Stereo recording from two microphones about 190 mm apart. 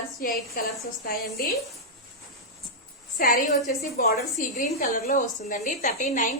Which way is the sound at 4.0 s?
45° left (ahead or behind).